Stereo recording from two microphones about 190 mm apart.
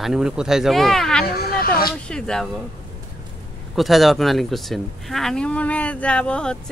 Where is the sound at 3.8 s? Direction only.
Centre (ahead or behind).